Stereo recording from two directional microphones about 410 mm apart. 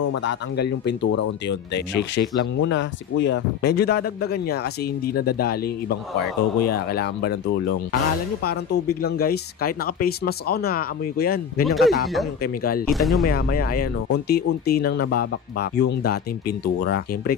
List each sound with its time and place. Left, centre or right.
0.0 s speech: left
11.6 s speech: centre
13.2 s speech: left